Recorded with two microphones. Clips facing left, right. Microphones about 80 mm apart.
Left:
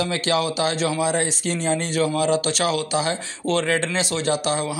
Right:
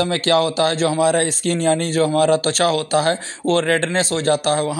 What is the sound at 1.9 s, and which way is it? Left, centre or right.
A man's voice, right.